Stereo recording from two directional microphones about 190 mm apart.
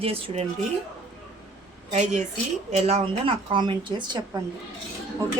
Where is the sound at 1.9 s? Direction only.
35° right (ahead or behind).